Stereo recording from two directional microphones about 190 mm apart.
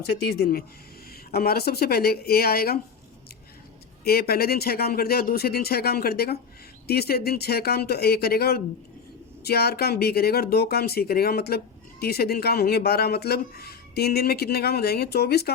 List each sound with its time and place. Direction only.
0.0 s speech: 55° left (ahead or behind)
4.0 s speech: 55° left (ahead or behind)